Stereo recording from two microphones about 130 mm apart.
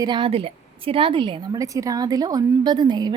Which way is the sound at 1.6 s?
25° right (ahead or behind).